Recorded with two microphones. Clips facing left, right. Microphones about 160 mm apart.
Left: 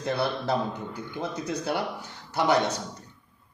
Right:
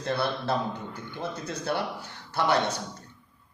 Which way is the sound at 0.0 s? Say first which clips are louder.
Left 1 dB; 15° left (ahead or behind).